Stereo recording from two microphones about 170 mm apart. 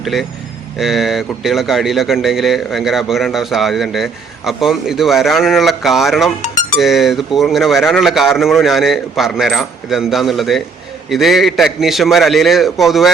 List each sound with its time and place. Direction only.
0.0 s a man's voice: centre (ahead or behind)
6.4 s music: 45° left (ahead or behind)
6.7 s a man's voice: centre (ahead or behind)